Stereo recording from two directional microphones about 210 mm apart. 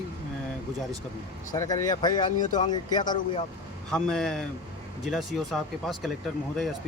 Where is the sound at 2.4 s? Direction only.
35° left (ahead or behind).